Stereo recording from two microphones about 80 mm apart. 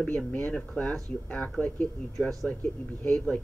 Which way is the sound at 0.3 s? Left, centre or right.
Centre.